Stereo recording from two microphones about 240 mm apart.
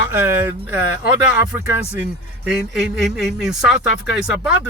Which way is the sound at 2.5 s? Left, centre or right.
Centre.